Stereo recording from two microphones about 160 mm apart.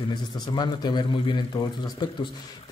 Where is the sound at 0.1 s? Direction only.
25° left (ahead or behind).